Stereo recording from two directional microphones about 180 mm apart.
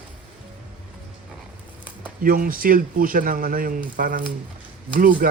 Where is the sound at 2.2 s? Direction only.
50° right (ahead or behind).